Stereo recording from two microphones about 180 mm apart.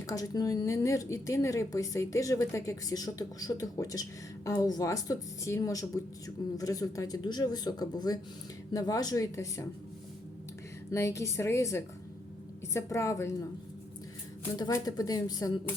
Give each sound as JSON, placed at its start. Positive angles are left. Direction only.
{"t": 0.1, "sound": "a woman's voice", "side_deg": 20}
{"t": 10.9, "sound": "a woman's voice", "side_deg": 15}
{"t": 14.5, "sound": "speech", "side_deg": 20}